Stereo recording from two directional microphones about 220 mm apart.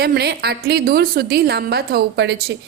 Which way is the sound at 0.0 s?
45° right (ahead or behind).